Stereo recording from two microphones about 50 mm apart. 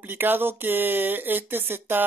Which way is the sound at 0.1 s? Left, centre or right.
Right.